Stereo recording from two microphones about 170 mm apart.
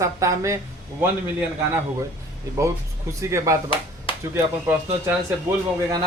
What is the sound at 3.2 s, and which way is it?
Speech, 15° right (ahead or behind).